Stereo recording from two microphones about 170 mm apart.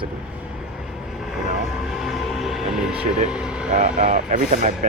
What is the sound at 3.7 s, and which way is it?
Speech, 40° right (ahead or behind).